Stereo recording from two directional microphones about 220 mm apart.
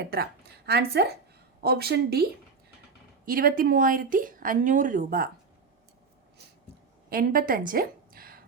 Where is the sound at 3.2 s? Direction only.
40° right (ahead or behind).